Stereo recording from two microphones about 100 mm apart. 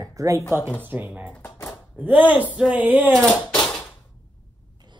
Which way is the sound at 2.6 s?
15° right (ahead or behind).